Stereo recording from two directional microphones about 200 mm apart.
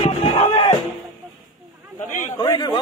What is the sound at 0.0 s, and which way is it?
Music, 25° left (ahead or behind).